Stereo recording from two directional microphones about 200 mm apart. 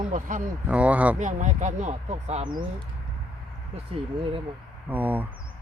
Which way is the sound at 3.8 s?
25° right (ahead or behind).